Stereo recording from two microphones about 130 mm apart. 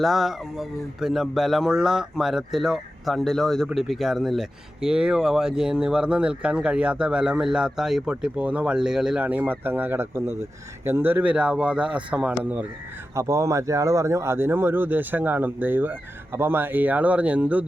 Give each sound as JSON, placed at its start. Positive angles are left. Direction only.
{"t": 0.0, "sound": "speech", "side_deg": 0}